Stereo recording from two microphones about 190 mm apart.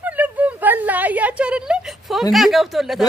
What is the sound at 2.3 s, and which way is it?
Speech, centre (ahead or behind).